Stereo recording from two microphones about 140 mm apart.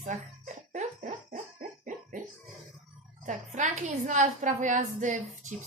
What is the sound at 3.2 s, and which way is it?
Speech, 60° right (ahead or behind).